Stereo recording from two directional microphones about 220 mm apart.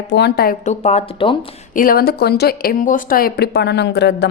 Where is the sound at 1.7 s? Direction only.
40° left (ahead or behind).